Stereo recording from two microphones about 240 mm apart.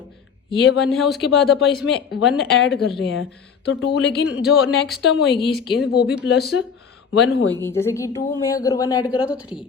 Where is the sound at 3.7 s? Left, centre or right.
Left.